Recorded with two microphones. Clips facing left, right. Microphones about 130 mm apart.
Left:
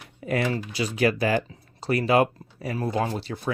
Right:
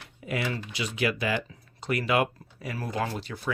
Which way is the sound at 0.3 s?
45° left (ahead or behind).